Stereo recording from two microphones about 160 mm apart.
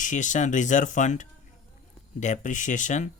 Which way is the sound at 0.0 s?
50° left (ahead or behind).